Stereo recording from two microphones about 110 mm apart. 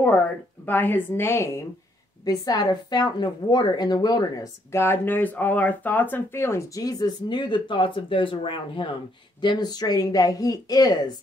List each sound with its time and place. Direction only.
0.7 s speech: 15° left (ahead or behind)
2.2 s a woman's voice: 35° left (ahead or behind)
4.7 s a woman's voice: 20° left (ahead or behind); by 11.1 s 35° left (ahead or behind)